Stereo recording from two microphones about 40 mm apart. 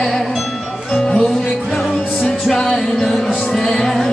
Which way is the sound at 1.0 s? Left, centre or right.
Centre.